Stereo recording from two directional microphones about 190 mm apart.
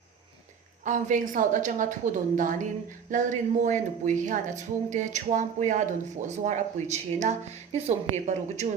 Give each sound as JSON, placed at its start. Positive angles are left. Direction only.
{"t": 0.9, "sound": "a woman's voice", "side_deg": -45}